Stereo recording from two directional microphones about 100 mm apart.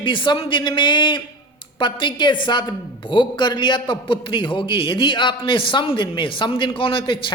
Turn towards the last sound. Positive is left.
turn(degrees=55)  # may be behind; listen again after turning